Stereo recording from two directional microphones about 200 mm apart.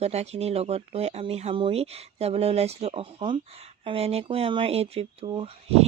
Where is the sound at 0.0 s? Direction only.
30° right (ahead or behind).